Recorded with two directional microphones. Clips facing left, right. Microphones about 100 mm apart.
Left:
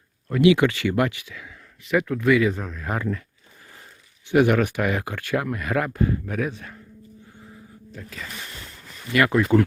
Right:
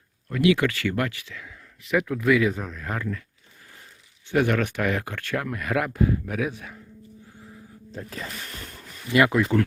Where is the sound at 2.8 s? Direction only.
15° left (ahead or behind).